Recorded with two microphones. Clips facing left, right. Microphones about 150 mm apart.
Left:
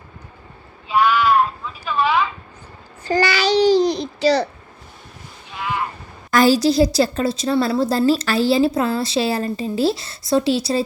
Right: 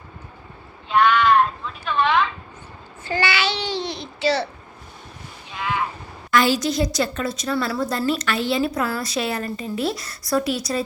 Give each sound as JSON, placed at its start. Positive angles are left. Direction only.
{"t": 0.9, "sound": "a sound", "side_deg": 5}
{"t": 3.1, "sound": "child singing", "side_deg": 40}
{"t": 5.5, "sound": "boat", "side_deg": 0}
{"t": 6.3, "sound": "a woman's voice", "side_deg": 40}